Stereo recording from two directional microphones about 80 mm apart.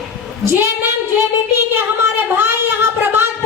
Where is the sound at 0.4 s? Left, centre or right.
Right.